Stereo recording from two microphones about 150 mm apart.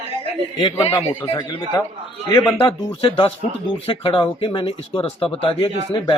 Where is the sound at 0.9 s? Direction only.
15° left (ahead or behind).